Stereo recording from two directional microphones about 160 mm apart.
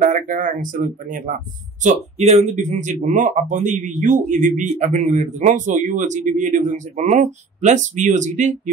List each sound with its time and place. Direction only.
0.0 s speech: 55° right (ahead or behind)
1.8 s speech: 45° right (ahead or behind)